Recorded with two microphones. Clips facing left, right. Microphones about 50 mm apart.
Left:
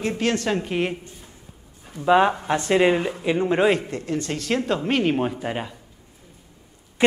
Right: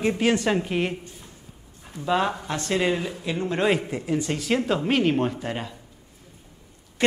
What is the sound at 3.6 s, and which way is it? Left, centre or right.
Speech, centre.